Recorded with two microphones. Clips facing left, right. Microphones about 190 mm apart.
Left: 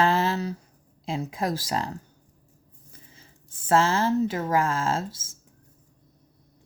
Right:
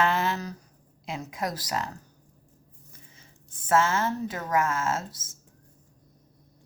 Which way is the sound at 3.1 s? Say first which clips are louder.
Left 1 dB; 30° left (ahead or behind).